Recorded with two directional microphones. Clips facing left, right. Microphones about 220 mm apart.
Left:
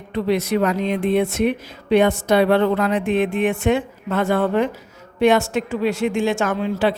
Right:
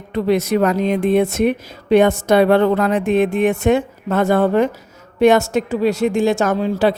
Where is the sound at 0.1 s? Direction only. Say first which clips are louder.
Right 3 dB; 45° right (ahead or behind).